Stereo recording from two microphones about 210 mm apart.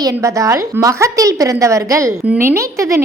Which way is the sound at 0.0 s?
15° right (ahead or behind).